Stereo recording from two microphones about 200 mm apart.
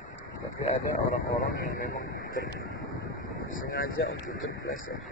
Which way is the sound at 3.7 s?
50° left (ahead or behind).